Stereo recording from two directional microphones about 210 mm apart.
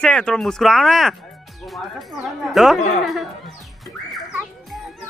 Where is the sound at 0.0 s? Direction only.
5° left (ahead or behind).